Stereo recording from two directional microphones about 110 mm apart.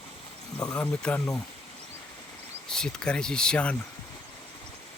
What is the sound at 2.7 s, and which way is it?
Speech, 5° left (ahead or behind).